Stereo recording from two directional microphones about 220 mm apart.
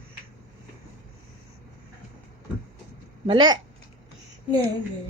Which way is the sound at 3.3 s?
20° right (ahead or behind).